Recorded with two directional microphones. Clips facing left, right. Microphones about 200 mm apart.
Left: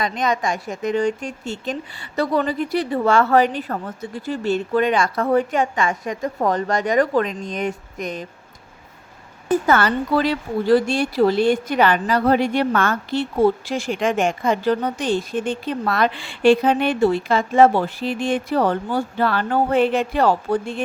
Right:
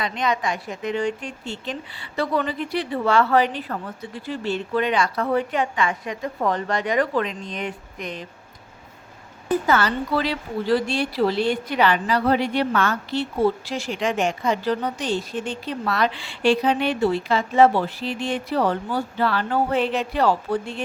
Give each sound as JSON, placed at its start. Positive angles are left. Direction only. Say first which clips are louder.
{"t": 0.0, "sound": "speech", "louder": "left 3 dB", "side_deg": 45}
{"t": 9.5, "sound": "speech", "louder": "left 3 dB", "side_deg": 55}